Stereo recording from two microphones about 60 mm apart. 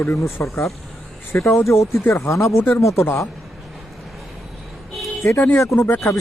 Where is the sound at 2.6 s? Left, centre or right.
Left.